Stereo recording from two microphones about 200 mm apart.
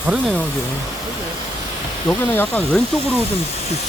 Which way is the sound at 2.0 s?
10° left (ahead or behind).